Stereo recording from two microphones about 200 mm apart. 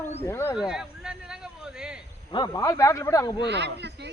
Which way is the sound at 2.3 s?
20° left (ahead or behind).